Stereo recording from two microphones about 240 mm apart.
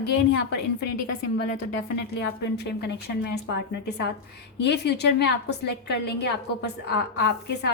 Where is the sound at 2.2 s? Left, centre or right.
Left.